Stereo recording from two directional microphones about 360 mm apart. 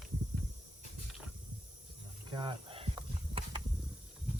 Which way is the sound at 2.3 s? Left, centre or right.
Centre.